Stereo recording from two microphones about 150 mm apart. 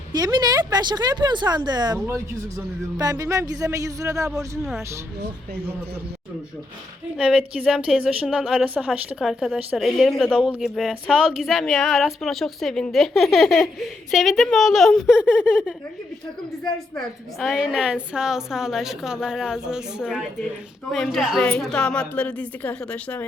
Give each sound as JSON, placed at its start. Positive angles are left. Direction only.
{"t": 0.1, "sound": "speech", "side_deg": -25}
{"t": 3.0, "sound": "speech", "side_deg": -20}
{"t": 7.2, "sound": "a woman's voice", "side_deg": -5}
{"t": 17.4, "sound": "a woman's voice", "side_deg": -5}
{"t": 20.9, "sound": "a woman's voice", "side_deg": 0}